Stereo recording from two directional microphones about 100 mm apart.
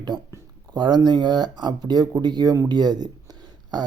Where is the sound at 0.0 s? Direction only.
40° right (ahead or behind).